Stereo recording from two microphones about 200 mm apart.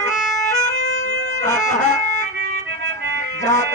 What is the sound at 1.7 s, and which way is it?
Speech, 35° left (ahead or behind).